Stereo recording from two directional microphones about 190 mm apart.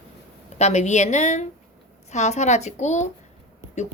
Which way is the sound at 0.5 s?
35° left (ahead or behind).